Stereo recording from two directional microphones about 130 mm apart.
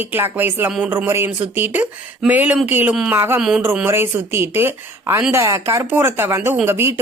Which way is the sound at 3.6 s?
15° right (ahead or behind).